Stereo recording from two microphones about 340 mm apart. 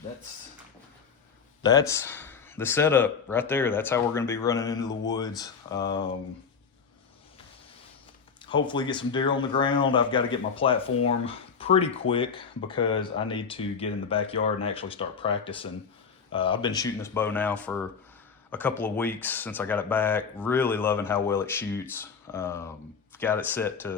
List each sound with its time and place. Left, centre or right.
1.6 s speech: centre
8.4 s speech: centre